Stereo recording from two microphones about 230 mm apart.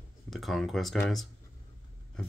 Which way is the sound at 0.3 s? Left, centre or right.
Centre.